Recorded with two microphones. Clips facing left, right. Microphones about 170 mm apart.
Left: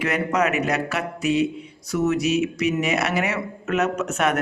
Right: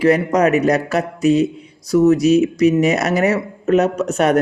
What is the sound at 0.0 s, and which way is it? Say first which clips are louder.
A man's voice: right 8 dB; 35° right (ahead or behind).